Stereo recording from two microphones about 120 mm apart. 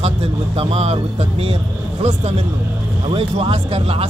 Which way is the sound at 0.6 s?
60° right (ahead or behind).